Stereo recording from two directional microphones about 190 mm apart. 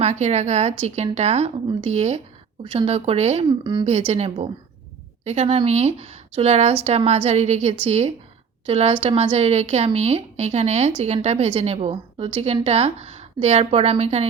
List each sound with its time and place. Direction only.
0.0 s a woman's voice: 35° right (ahead or behind)